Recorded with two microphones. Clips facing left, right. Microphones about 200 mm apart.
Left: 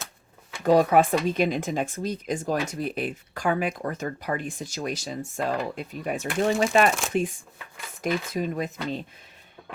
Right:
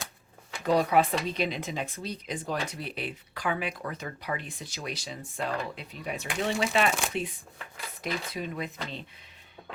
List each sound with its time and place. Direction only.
0.6 s speech: 50° left (ahead or behind)